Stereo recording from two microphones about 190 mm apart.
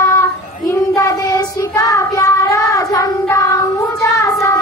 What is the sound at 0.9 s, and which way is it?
Child singing, 15° left (ahead or behind).